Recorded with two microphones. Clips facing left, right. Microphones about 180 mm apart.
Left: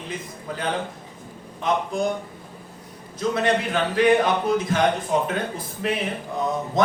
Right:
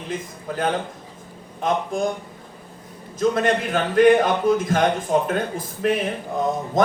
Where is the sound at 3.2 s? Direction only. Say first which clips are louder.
Right 2 dB; 50° right (ahead or behind).